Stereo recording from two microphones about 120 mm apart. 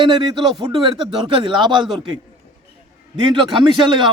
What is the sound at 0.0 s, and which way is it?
Speech, 35° right (ahead or behind).